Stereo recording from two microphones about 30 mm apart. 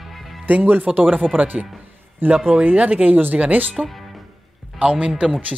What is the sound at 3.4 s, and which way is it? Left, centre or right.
Speech, right.